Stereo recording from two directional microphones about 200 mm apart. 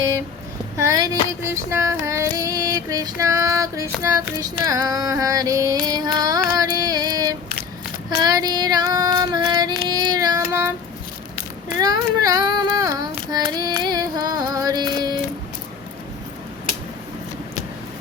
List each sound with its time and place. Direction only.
0.8 s female singing: 15° right (ahead or behind)
1.5 s child singing: 15° right (ahead or behind)
4.0 s female singing: 20° right (ahead or behind)
11.8 s child singing: 20° right (ahead or behind)